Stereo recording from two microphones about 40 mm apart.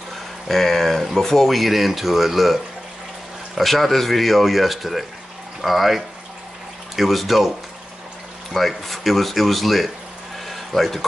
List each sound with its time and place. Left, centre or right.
0.5 s speech: centre
8.5 s speech: centre
10.4 s a sound: centre